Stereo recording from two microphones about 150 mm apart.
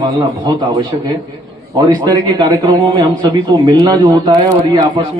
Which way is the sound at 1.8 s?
30° right (ahead or behind).